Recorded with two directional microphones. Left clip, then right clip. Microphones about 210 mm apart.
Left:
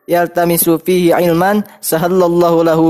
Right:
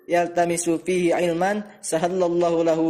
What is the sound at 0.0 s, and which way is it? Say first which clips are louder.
A man's voice: left 8 dB; 35° left (ahead or behind).